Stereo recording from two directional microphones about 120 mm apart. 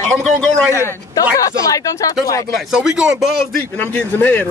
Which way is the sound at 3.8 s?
15° left (ahead or behind).